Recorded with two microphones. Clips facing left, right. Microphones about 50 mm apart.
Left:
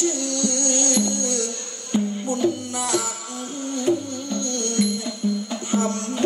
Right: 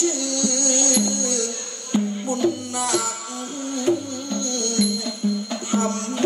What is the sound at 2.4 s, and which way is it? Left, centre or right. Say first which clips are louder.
Music: right 1 dB; right.